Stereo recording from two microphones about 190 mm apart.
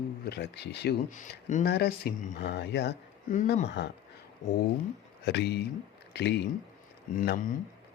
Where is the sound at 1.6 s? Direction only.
60° left (ahead or behind).